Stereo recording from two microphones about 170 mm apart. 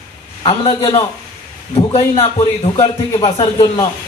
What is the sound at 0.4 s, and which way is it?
A man's voice, 35° left (ahead or behind).